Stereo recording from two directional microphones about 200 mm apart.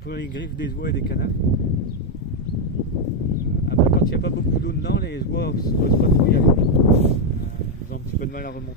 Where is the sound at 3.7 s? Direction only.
55° left (ahead or behind).